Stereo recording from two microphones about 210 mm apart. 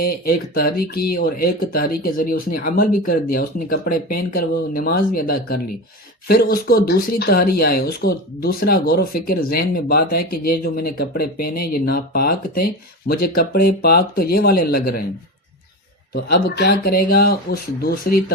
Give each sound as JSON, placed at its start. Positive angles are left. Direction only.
{"t": 0.0, "sound": "speech", "side_deg": 45}
{"t": 16.1, "sound": "speech", "side_deg": 50}